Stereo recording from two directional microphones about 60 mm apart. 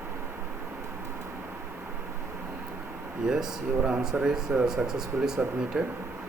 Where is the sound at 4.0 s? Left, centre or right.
Centre.